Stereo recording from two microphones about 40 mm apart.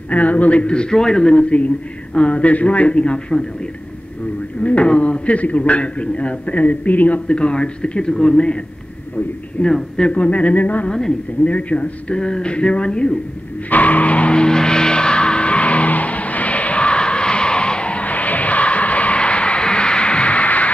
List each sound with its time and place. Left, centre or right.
0.1 s a man's voice: left
4.6 s a man's voice: left
7.2 s a man's voice: left
9.6 s a man's voice: left
10.9 s a woman's voice: centre
11.4 s a man's voice: left
12.2 s a man's voice: left
13.7 s skidding: left